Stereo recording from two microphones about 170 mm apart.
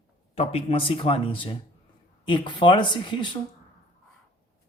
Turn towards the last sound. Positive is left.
turn(degrees=30)  # may be behind; listen again after turning